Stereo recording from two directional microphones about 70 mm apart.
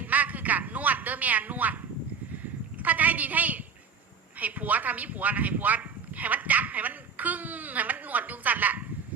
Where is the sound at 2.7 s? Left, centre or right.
Right.